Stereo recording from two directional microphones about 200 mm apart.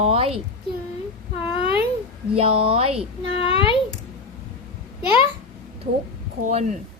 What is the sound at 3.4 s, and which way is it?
Speech, 25° left (ahead or behind).